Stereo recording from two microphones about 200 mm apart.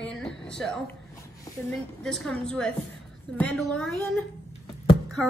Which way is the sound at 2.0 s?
5° left (ahead or behind).